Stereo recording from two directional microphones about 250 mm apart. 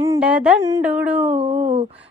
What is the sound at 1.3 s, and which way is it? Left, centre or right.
Speech, right.